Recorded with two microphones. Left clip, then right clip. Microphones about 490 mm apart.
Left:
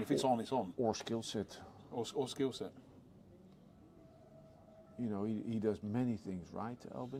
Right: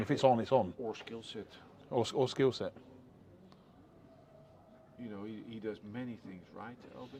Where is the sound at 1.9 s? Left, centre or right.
Right.